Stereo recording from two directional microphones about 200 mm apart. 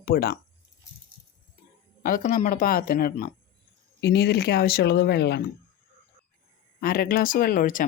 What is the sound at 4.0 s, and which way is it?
Speech, 55° left (ahead or behind).